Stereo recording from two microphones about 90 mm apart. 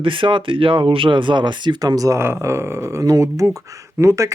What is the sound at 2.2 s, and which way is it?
Speech, 30° right (ahead or behind).